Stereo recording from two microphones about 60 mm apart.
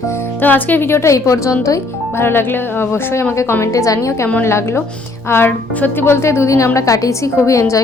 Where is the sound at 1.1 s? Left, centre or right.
Left.